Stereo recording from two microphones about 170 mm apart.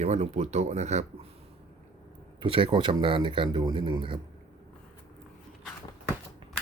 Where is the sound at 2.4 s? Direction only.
30° right (ahead or behind).